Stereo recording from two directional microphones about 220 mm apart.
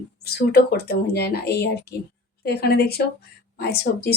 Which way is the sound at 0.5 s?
45° left (ahead or behind).